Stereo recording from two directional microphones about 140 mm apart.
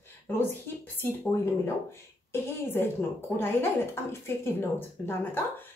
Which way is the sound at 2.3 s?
15° left (ahead or behind).